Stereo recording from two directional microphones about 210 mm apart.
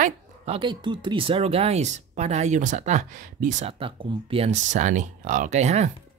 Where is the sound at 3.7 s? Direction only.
25° right (ahead or behind).